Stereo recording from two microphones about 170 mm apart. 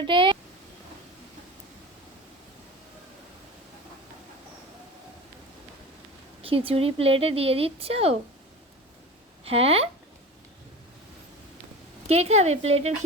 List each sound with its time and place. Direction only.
0.0 s a sound: 30° right (ahead or behind)
6.4 s speech: 35° right (ahead or behind)
9.4 s speech: 35° right (ahead or behind)
12.0 s speech: 35° right (ahead or behind)